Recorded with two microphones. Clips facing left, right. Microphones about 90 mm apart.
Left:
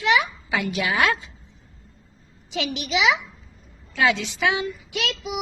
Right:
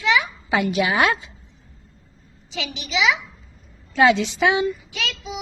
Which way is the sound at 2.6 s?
60° left (ahead or behind).